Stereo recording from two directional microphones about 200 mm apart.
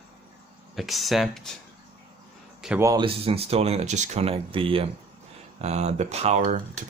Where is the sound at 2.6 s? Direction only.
5° right (ahead or behind).